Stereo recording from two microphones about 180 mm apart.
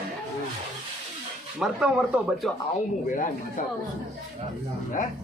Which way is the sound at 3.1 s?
45° left (ahead or behind).